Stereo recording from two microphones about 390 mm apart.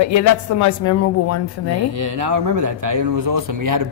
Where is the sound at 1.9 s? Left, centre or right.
Right.